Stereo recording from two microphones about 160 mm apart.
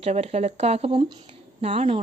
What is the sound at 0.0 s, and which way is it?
Speech, 40° right (ahead or behind).